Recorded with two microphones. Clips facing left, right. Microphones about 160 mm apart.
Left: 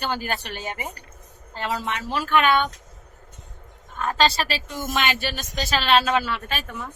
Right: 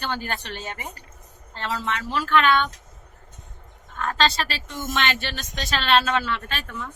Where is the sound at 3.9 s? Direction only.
15° left (ahead or behind).